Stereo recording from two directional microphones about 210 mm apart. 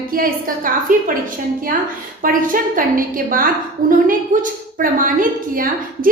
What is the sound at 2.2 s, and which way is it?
A woman's voice, 40° right (ahead or behind).